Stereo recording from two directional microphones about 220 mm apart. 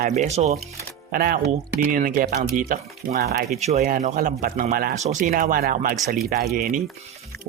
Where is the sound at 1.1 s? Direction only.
40° right (ahead or behind).